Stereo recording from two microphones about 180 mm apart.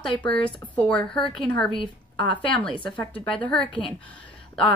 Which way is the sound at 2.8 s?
10° left (ahead or behind).